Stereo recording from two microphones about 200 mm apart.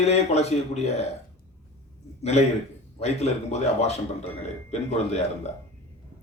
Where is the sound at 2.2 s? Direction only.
35° left (ahead or behind).